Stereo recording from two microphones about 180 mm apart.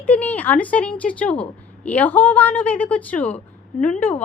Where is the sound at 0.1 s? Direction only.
10° left (ahead or behind).